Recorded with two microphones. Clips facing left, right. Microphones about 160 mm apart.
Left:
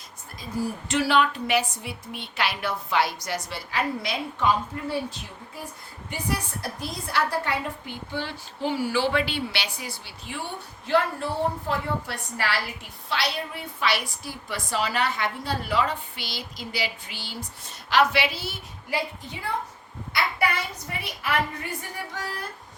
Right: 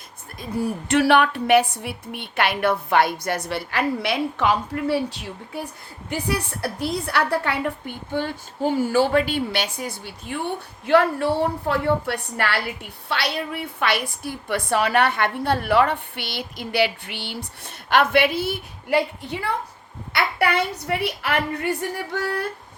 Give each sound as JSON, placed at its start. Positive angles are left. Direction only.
{"t": 0.3, "sound": "a woman's voice", "side_deg": -60}
{"t": 10.8, "sound": "a woman's voice", "side_deg": -70}